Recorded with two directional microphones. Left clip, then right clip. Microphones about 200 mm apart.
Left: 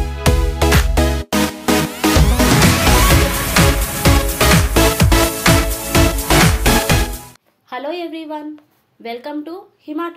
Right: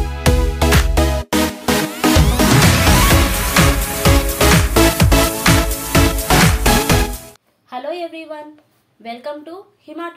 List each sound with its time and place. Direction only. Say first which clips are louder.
0.0 s music: even; centre (ahead or behind)
7.7 s a sound: left 1 dB; 55° left (ahead or behind)
9.0 s speech: left 2 dB; 50° left (ahead or behind)